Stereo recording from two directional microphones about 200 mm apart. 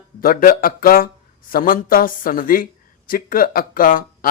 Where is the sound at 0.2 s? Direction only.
45° left (ahead or behind).